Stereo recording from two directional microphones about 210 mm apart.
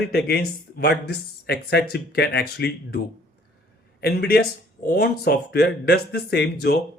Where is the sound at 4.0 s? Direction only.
50° left (ahead or behind).